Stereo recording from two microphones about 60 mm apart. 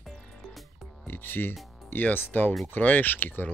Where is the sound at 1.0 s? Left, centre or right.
Left.